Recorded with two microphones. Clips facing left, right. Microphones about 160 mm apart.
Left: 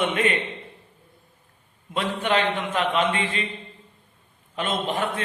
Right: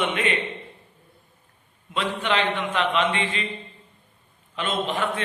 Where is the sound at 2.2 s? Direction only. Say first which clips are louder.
Left 2 dB; 45° left (ahead or behind).